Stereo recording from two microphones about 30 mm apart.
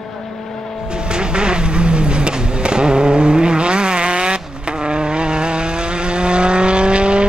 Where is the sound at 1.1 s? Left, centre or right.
Right.